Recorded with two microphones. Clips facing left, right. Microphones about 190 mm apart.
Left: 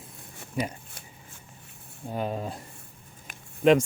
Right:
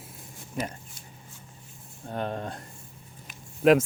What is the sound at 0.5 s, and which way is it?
Speech, 10° left (ahead or behind).